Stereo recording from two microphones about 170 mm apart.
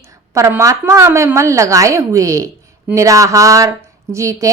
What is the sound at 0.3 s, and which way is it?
A woman's voice, 15° right (ahead or behind).